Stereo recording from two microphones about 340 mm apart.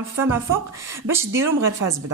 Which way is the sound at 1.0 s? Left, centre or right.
Centre.